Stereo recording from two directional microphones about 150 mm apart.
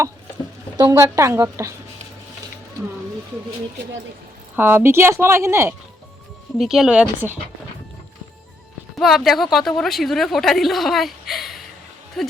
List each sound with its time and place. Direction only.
0.8 s a woman's voice: 20° right (ahead or behind)
4.5 s speech: 15° right (ahead or behind)
6.6 s a woman's voice: 5° right (ahead or behind)
9.0 s a woman's voice: centre (ahead or behind)